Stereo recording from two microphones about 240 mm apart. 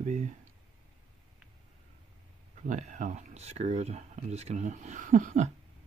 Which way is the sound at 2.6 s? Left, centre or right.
Right.